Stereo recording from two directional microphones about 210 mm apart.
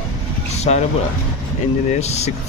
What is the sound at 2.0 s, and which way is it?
Speech, 30° left (ahead or behind).